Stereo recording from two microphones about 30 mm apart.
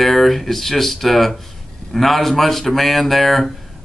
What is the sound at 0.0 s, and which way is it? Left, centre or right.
Speech, centre.